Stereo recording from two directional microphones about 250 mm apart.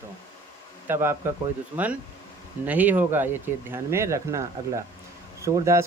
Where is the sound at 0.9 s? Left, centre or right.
Centre.